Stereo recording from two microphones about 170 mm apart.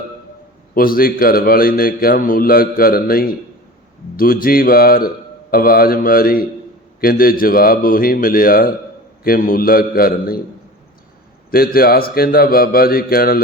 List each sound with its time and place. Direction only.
0.7 s a man's voice: 60° left (ahead or behind)
11.5 s a man's voice: 60° left (ahead or behind)